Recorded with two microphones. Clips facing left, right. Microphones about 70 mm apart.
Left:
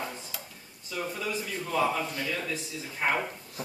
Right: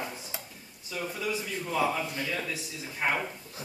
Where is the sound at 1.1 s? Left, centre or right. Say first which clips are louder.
Right 2 dB; centre.